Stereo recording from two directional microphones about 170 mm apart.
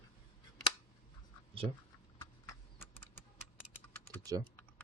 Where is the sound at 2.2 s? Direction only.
20° left (ahead or behind).